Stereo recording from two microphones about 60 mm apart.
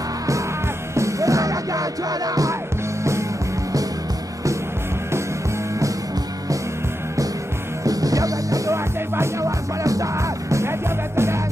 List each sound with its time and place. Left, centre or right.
0.9 s music: right
3.0 s music: right
7.8 s music: right
9.1 s music: right
9.8 s music: right